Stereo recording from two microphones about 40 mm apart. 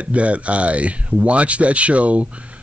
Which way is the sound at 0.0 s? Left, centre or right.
Right.